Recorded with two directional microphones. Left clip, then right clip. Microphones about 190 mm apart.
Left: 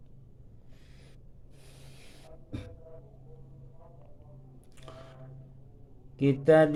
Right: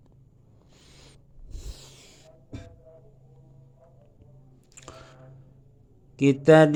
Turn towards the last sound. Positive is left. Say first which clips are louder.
# right 5 dB
turn(degrees=-30)  # may be behind; listen again after turning